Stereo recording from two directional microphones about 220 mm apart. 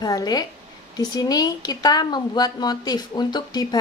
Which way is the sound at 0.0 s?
15° left (ahead or behind).